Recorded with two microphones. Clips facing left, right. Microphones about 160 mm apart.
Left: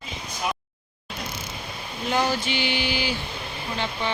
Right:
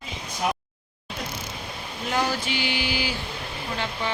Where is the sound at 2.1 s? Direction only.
5° right (ahead or behind).